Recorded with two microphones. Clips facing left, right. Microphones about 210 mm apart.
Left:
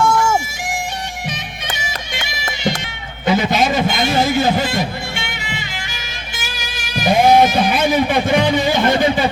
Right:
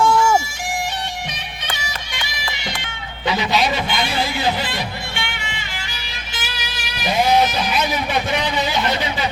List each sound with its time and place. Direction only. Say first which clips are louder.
2.2 s music: left 10 dB; 45° left (ahead or behind)
3.2 s a man's voice: left 4 dB; 50° left (ahead or behind)
7.0 s a sound: left 5 dB; 50° left (ahead or behind)